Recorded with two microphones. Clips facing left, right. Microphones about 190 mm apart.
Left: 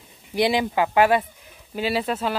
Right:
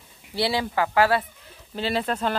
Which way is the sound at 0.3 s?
15° left (ahead or behind).